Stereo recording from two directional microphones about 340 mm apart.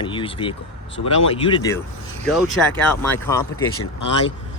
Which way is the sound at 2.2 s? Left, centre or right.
Centre.